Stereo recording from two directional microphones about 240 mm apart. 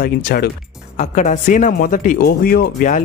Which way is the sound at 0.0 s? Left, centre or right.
Left.